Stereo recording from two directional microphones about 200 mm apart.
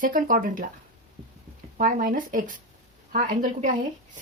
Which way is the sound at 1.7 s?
45° right (ahead or behind).